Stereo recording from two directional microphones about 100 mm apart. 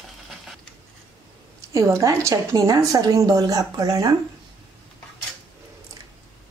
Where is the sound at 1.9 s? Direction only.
30° right (ahead or behind).